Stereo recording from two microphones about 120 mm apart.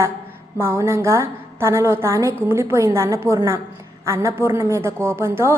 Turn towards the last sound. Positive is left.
turn(degrees=-20)  # may be behind; listen again after turning